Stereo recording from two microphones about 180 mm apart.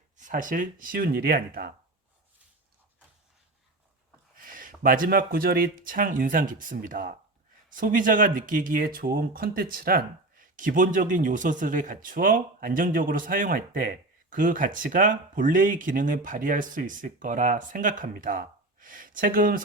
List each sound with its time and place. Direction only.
0.2 s speech: 45° right (ahead or behind)
4.4 s speech: 50° right (ahead or behind)